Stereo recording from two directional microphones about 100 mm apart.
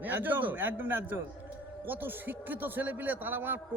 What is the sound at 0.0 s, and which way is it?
A man's voice, 20° right (ahead or behind).